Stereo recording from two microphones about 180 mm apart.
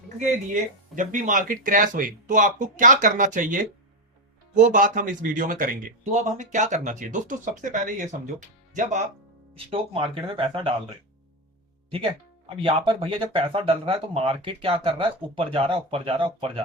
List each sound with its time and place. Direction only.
0.2 s speech: 45° right (ahead or behind)
9.6 s speech: 30° right (ahead or behind)